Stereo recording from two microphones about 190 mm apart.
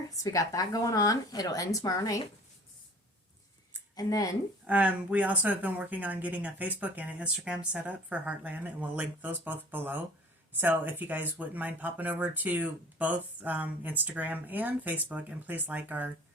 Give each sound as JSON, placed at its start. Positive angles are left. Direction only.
{"t": 0.2, "sound": "speech", "side_deg": 20}
{"t": 3.9, "sound": "speech", "side_deg": 20}
{"t": 4.6, "sound": "a woman's voice", "side_deg": -5}